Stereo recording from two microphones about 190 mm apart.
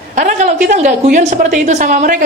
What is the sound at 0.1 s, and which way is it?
A man's voice, 40° right (ahead or behind).